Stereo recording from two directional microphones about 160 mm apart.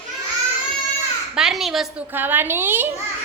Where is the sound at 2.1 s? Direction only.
10° right (ahead or behind).